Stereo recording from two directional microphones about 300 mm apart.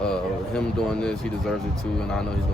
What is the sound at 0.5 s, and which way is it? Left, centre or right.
Speech, centre.